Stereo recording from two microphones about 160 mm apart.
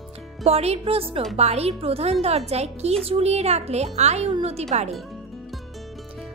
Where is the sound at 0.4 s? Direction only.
40° right (ahead or behind).